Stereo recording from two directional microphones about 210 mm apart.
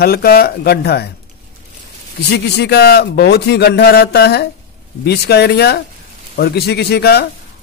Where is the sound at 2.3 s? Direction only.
50° left (ahead or behind).